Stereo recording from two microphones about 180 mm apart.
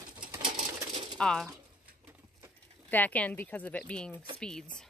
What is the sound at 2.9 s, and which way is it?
Speech, 10° left (ahead or behind).